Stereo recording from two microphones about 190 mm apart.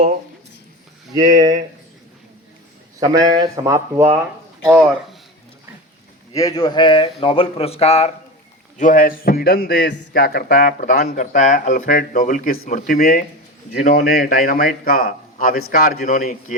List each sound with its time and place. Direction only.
1.1 s a man's voice: 20° right (ahead or behind)
3.0 s a man's voice: 20° right (ahead or behind)
6.3 s speech: 20° left (ahead or behind)
8.8 s a man's voice: 45° left (ahead or behind)